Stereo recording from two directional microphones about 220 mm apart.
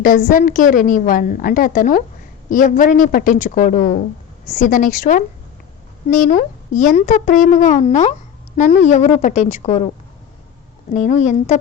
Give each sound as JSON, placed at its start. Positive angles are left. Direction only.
{"t": 0.0, "sound": "speech", "side_deg": 40}
{"t": 10.9, "sound": "speech", "side_deg": 30}